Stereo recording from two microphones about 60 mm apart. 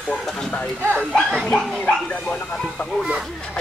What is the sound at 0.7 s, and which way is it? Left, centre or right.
Speech, right.